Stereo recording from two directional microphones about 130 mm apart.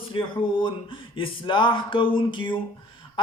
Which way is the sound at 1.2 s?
40° left (ahead or behind).